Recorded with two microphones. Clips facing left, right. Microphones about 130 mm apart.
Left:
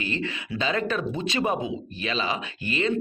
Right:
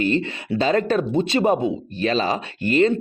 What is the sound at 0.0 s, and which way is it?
Speech, 40° right (ahead or behind).